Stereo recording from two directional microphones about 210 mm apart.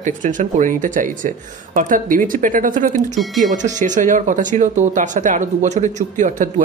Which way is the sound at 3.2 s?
Centre (ahead or behind).